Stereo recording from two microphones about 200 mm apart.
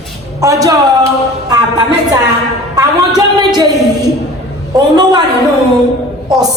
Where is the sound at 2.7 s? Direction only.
20° right (ahead or behind).